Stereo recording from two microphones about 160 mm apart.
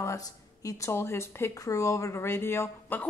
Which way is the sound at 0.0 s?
20° left (ahead or behind).